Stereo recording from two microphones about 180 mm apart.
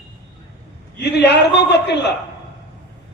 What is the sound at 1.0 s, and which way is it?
A man's voice, 65° left (ahead or behind).